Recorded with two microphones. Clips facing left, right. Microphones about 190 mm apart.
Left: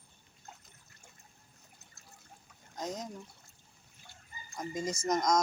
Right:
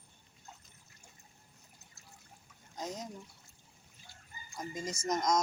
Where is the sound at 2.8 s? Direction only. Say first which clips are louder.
Left 2 dB; 5° right (ahead or behind).